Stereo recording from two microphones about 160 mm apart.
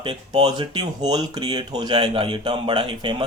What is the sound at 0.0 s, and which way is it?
Speech, 30° right (ahead or behind).